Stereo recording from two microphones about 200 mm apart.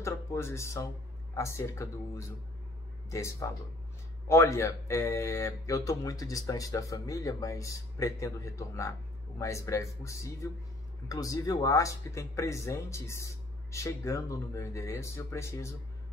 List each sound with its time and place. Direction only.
0.0 s speech: 15° left (ahead or behind)